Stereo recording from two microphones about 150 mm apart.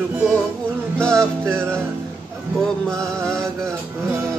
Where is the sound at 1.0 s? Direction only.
5° left (ahead or behind).